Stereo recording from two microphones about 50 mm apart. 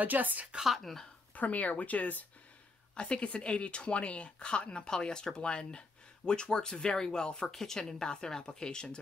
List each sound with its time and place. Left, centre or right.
0.0 s a woman's voice: right
0.7 s speech: centre
1.3 s speech: left
2.9 s speech: centre